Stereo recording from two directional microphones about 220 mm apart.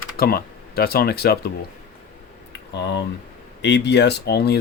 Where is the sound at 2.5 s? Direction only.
50° left (ahead or behind).